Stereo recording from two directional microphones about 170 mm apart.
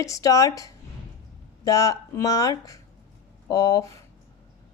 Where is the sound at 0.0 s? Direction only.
20° left (ahead or behind).